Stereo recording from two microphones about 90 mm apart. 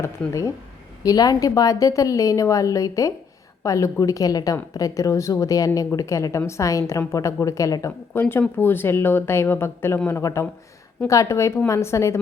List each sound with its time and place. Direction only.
1.0 s a woman's voice: 45° left (ahead or behind)